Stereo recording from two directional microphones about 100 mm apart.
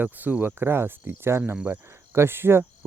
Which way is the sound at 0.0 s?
15° right (ahead or behind).